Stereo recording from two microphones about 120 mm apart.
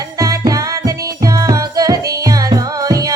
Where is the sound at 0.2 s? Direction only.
30° right (ahead or behind).